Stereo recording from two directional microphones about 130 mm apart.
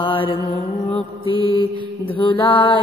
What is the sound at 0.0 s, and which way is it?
Mantra, 40° left (ahead or behind).